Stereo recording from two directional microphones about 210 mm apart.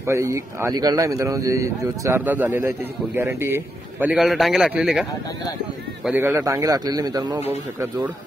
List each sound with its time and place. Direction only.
0.0 s a man's voice: 15° right (ahead or behind)
6.0 s a man's voice: 10° right (ahead or behind)